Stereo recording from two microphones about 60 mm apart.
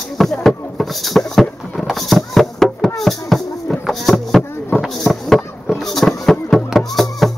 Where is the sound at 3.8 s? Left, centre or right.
Centre.